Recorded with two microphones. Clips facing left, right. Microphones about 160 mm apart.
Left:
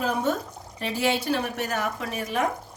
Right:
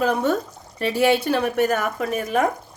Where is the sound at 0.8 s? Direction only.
60° right (ahead or behind).